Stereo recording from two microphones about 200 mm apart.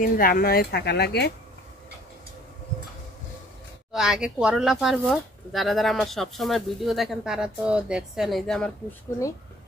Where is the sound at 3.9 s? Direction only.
5° right (ahead or behind).